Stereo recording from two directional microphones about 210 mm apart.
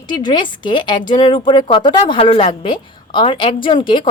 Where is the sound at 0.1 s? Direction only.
20° left (ahead or behind).